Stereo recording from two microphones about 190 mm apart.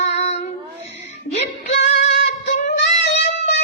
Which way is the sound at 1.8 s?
35° left (ahead or behind).